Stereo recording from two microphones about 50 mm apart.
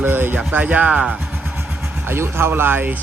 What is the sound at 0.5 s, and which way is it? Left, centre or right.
Speech, right.